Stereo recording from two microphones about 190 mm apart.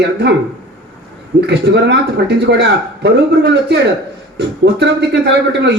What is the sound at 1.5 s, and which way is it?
A man's voice, 65° right (ahead or behind).